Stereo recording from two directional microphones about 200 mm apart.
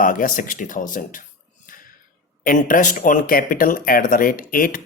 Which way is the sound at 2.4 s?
40° left (ahead or behind).